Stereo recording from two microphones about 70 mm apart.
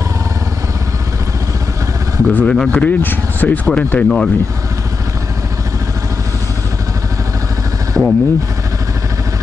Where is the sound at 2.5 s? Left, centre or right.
Centre.